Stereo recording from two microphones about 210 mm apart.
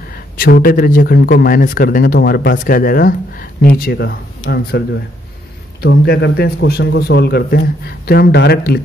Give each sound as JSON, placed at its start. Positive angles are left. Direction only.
{"t": 0.4, "sound": "a man's voice", "side_deg": 45}